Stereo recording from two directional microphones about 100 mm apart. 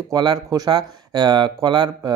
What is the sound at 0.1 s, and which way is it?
Speech, 45° right (ahead or behind).